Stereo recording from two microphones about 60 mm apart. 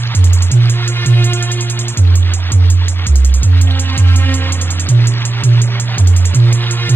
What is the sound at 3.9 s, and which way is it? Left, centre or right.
Music, left.